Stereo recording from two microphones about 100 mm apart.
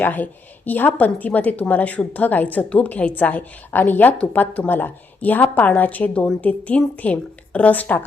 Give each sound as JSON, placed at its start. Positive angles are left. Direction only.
{"t": 0.0, "sound": "a woman's voice", "side_deg": 15}